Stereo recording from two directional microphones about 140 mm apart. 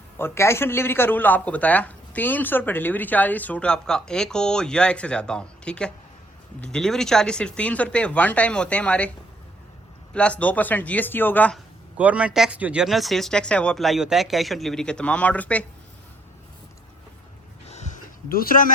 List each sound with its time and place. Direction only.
0.2 s a man's voice: 15° left (ahead or behind)
10.2 s a man's voice: 10° left (ahead or behind)
11.9 s speech: 10° right (ahead or behind); by 15.6 s 10° left (ahead or behind)
17.7 s a sound: 55° left (ahead or behind); by 18.7 s 85° left